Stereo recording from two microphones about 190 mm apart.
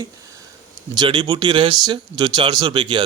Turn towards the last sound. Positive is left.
turn(degrees=-25)  # may be behind; listen again after turning